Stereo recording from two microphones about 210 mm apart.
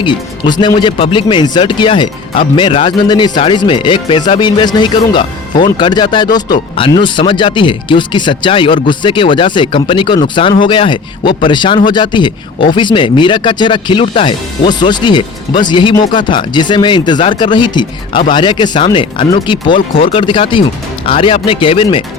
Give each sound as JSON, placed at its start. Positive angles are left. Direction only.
{"t": 0.0, "sound": "speech", "side_deg": 20}